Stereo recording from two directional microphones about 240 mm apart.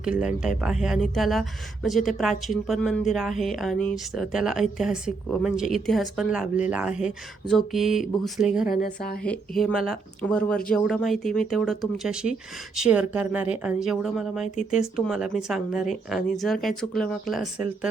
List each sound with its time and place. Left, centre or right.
0.0 s speech: centre
8.6 s speech: left
9.2 s speech: centre